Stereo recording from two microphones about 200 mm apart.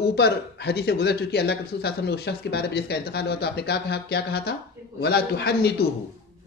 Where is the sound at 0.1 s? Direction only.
55° left (ahead or behind).